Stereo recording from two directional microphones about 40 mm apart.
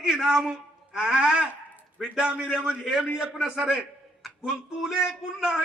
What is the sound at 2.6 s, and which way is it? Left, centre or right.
A man's voice, centre.